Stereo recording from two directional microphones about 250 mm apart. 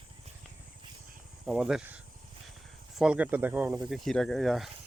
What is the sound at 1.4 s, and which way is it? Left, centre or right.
Speech, centre.